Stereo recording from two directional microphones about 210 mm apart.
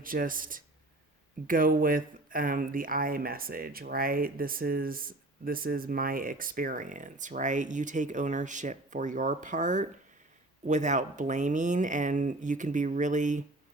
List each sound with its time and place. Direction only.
0.0 s speech: 40° right (ahead or behind)